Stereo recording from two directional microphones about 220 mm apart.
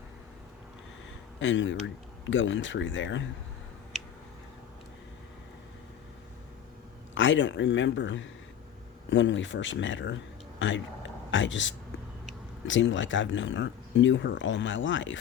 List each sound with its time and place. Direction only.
1.4 s speech: 60° left (ahead or behind)
7.1 s speech: 55° left (ahead or behind)